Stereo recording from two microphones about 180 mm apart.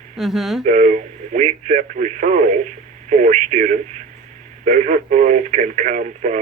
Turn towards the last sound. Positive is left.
turn(degrees=-45)  # may be behind; listen again after turning